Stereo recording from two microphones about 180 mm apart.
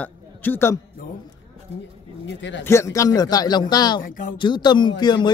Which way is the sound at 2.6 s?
15° left (ahead or behind).